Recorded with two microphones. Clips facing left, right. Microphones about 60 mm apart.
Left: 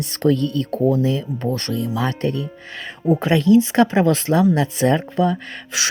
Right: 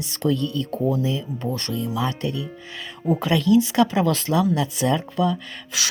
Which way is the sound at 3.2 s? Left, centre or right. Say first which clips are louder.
Left 3 dB; left.